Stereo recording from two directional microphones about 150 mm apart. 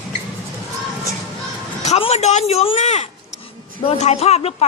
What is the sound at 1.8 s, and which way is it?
Speech, 45° left (ahead or behind).